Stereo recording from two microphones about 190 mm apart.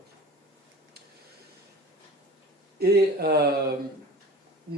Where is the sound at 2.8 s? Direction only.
55° right (ahead or behind).